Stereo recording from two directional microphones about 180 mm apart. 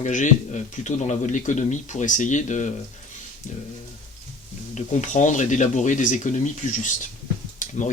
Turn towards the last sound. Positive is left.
turn(degrees=45)  # may be behind; listen again after turning